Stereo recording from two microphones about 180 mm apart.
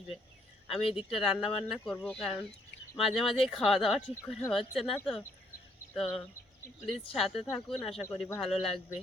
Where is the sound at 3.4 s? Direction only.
Centre (ahead or behind).